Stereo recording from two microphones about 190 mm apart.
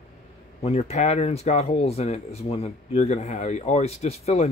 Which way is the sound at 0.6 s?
35° left (ahead or behind).